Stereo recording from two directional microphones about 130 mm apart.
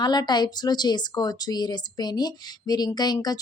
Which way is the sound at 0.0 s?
30° left (ahead or behind).